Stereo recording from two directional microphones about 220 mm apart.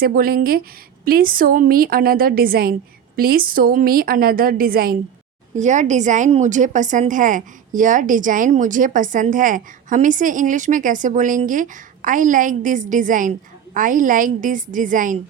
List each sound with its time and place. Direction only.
0.0 s a woman's voice: 40° right (ahead or behind)